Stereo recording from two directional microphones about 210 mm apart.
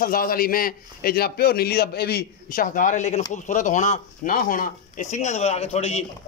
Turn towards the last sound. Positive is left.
turn(degrees=30)  # may be behind; listen again after turning